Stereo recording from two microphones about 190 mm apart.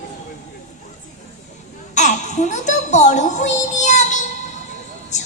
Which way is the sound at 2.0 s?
40° left (ahead or behind).